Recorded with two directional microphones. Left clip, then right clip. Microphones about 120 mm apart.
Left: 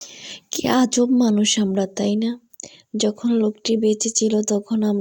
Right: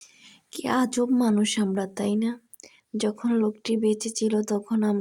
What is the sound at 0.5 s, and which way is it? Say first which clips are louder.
A woman's voice: left 6 dB; 55° left (ahead or behind).